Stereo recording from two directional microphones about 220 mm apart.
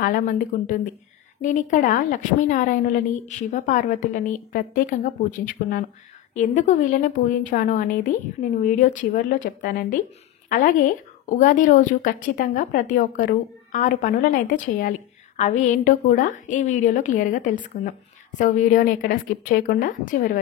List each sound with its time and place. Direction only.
0.0 s a woman's voice: 40° left (ahead or behind)